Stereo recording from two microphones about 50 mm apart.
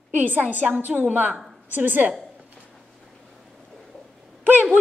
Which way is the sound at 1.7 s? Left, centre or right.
Right.